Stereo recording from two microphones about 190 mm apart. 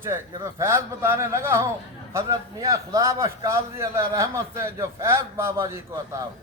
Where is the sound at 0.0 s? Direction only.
15° right (ahead or behind).